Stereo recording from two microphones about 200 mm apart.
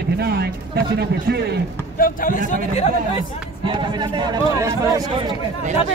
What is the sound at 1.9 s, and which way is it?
Speech, 45° left (ahead or behind).